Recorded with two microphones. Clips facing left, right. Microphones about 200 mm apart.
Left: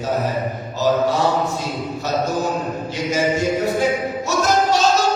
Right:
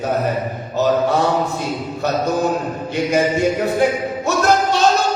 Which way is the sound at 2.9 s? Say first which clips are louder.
Right 3 dB; 60° right (ahead or behind).